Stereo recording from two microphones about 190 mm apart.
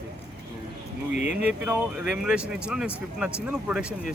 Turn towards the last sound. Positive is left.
turn(degrees=-5)  # may be behind; listen again after turning